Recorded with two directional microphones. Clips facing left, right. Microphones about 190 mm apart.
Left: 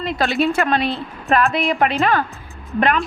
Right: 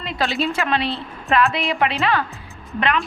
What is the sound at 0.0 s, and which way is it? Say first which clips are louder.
A woman's voice: left 4 dB; 45° left (ahead or behind).